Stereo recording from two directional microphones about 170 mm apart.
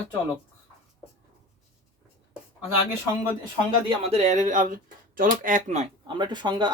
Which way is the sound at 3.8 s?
35° right (ahead or behind).